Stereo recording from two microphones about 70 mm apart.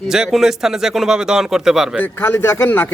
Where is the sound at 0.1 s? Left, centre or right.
Centre.